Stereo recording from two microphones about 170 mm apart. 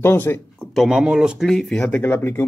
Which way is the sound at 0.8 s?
Centre (ahead or behind).